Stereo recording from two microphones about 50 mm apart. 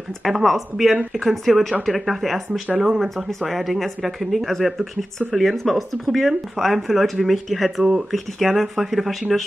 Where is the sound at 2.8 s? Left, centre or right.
Centre.